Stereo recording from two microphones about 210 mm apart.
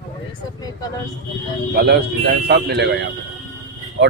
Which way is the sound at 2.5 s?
55° right (ahead or behind).